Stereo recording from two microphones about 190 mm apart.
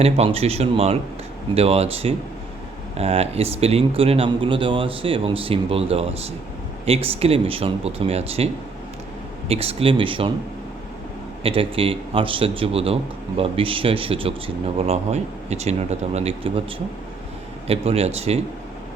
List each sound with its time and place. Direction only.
0.0 s speech: 35° right (ahead or behind)
9.5 s a man's voice: 30° right (ahead or behind)
11.4 s a man's voice: 30° right (ahead or behind)
17.7 s speech: 30° right (ahead or behind)